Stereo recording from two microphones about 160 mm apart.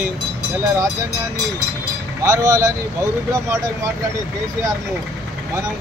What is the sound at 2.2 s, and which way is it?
Speech, 20° right (ahead or behind).